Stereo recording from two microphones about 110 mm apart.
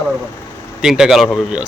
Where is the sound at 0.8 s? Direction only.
5° right (ahead or behind).